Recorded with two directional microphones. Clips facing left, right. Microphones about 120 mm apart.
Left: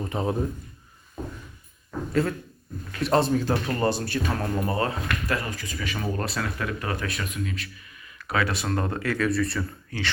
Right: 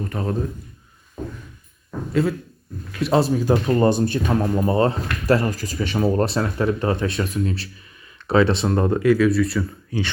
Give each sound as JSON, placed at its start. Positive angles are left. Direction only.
{"t": 0.0, "sound": "a man's voice", "side_deg": 20}
{"t": 2.2, "sound": "speech", "side_deg": 0}
{"t": 9.2, "sound": "speech", "side_deg": 0}